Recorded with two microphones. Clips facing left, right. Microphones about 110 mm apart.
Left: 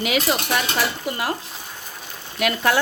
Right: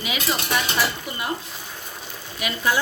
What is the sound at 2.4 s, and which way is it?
Speech, 70° left (ahead or behind).